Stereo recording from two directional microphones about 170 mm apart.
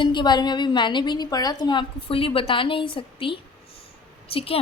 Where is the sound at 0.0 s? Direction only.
25° left (ahead or behind).